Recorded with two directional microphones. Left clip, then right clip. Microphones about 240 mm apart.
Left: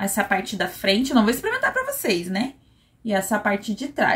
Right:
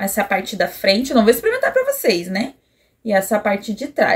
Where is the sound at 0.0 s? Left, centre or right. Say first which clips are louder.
Right 3 dB; centre.